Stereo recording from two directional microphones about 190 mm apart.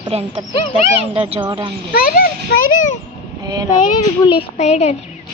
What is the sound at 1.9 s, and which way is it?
Speech, 50° left (ahead or behind).